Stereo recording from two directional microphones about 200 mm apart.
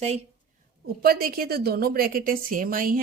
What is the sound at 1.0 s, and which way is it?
Speech, 50° right (ahead or behind).